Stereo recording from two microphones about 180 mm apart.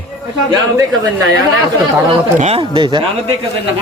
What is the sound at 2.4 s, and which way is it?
Speech, 35° right (ahead or behind).